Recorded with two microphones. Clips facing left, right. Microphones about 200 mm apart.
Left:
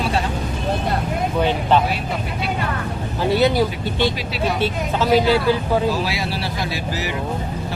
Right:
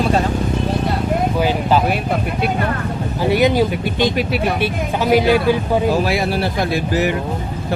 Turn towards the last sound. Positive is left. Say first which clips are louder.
# right 7 dB
turn(degrees=-55)  # may be behind; listen again after turning